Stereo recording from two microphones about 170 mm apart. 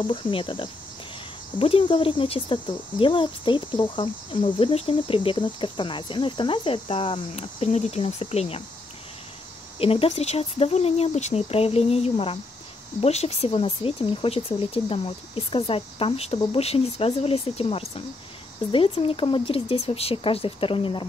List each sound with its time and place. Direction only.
0.0 s speech: 30° left (ahead or behind)
9.8 s speech: 35° left (ahead or behind)